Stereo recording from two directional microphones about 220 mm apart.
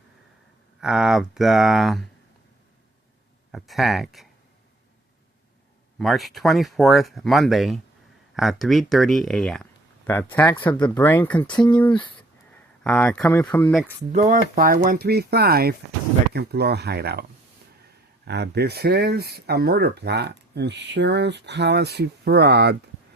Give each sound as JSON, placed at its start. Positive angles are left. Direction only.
{"t": 0.8, "sound": "speech", "side_deg": 0}
{"t": 3.5, "sound": "speech", "side_deg": 0}
{"t": 6.0, "sound": "speech", "side_deg": 0}
{"t": 11.4, "sound": "speech", "side_deg": 20}
{"t": 12.8, "sound": "speech", "side_deg": 5}
{"t": 14.1, "sound": "speech", "side_deg": -35}
{"t": 18.3, "sound": "speech", "side_deg": -50}